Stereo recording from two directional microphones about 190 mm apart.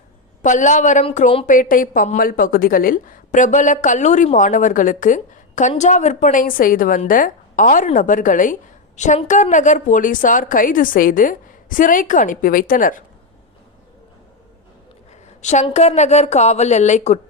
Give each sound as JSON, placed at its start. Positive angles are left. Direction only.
{"t": 0.4, "sound": "a woman's voice", "side_deg": 40}
{"t": 1.5, "sound": "a woman's voice", "side_deg": 45}
{"t": 15.1, "sound": "a woman's voice", "side_deg": 35}